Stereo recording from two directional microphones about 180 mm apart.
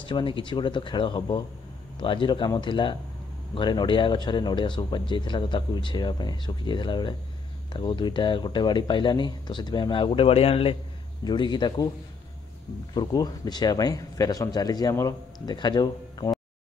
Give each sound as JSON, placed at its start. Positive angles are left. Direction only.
{"t": 0.0, "sound": "speech", "side_deg": 30}
{"t": 12.9, "sound": "speech", "side_deg": 25}